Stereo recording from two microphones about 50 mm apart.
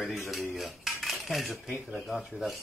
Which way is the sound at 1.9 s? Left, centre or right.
Centre.